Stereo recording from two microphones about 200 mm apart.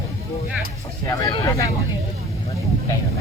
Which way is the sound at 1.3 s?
20° left (ahead or behind).